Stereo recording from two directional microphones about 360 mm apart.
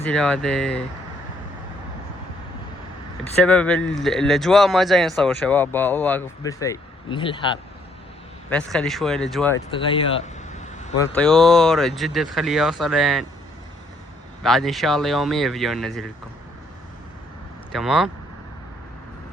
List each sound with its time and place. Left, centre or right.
0.0 s speech: centre
3.4 s speech: centre
8.4 s speech: centre
10.8 s vehicle: centre
11.0 s speech: centre
14.4 s speech: centre
17.7 s speech: centre